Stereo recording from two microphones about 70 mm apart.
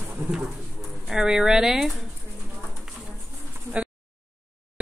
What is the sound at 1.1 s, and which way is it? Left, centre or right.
Speech, centre.